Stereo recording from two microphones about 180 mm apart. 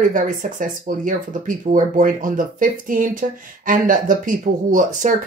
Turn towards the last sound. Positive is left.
turn(degrees=-45)  # may be behind; listen again after turning